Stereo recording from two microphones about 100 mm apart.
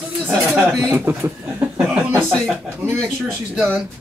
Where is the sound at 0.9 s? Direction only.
20° right (ahead or behind).